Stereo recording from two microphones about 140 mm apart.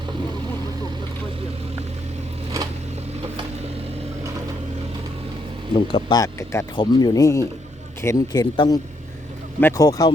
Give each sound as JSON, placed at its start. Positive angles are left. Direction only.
{"t": 5.7, "sound": "speech", "side_deg": 30}
{"t": 9.6, "sound": "a man's voice", "side_deg": 15}